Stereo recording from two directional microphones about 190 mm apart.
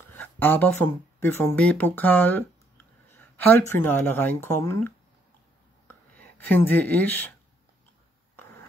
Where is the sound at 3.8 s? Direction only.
10° left (ahead or behind).